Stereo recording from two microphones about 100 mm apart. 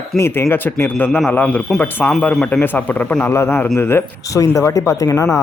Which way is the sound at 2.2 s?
5° left (ahead or behind).